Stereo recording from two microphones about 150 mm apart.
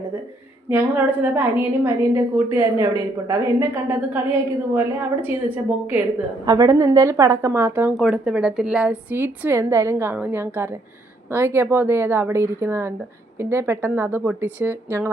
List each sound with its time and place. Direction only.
0.7 s a woman's voice: 15° right (ahead or behind)
6.4 s a woman's voice: 25° right (ahead or behind)